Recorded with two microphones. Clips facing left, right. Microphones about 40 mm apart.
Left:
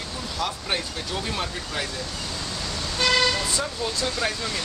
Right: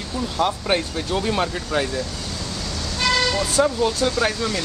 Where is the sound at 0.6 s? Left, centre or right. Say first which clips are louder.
Right 6 dB; centre.